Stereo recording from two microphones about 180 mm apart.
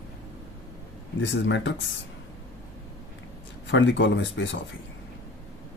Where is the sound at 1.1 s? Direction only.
90° left.